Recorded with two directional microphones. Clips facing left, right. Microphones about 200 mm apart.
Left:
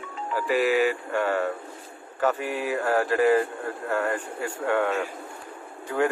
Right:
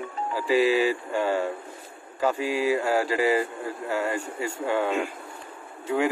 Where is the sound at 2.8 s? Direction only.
10° right (ahead or behind).